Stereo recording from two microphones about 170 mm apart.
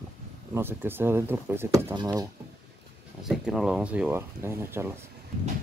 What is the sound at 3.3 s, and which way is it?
Speech, 5° right (ahead or behind).